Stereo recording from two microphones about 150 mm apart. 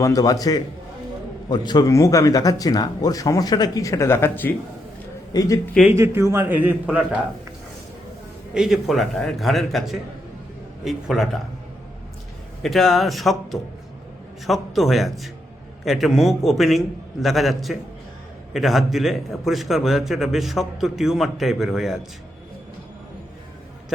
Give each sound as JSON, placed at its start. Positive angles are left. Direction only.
{"t": 0.0, "sound": "speech", "side_deg": 25}
{"t": 5.9, "sound": "a man's voice", "side_deg": -20}
{"t": 8.5, "sound": "a man's voice", "side_deg": -5}
{"t": 12.6, "sound": "a man's voice", "side_deg": 0}